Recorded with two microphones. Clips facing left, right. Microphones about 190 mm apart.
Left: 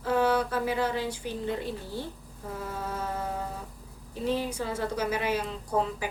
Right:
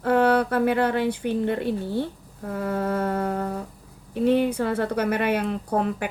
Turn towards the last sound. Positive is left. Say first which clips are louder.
# right 4 dB
turn(degrees=-60)  # may be behind; listen again after turning